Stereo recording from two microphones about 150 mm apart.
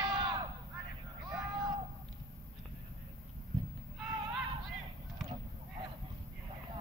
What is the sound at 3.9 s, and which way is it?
Horse, 5° right (ahead or behind).